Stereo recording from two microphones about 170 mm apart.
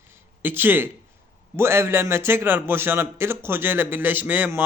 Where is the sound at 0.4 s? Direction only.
10° right (ahead or behind).